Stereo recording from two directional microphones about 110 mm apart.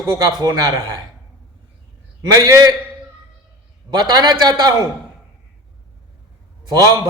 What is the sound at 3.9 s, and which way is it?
Speech, 40° right (ahead or behind).